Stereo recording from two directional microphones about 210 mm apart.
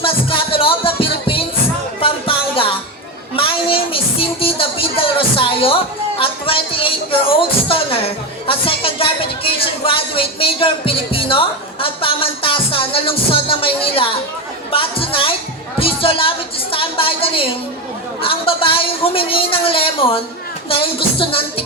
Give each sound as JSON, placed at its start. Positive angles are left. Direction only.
{"t": 0.0, "sound": "music", "side_deg": 25}
{"t": 6.1, "sound": "speech", "side_deg": 25}
{"t": 16.7, "sound": "a sound", "side_deg": 25}
{"t": 18.2, "sound": "speech", "side_deg": 25}